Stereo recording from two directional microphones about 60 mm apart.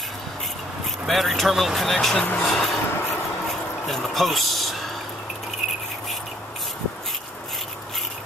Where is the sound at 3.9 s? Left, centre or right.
Centre.